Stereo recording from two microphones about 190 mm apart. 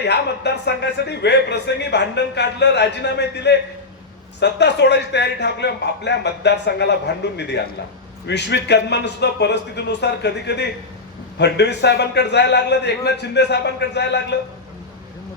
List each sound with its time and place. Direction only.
0.0 s a man's voice: 65° left (ahead or behind)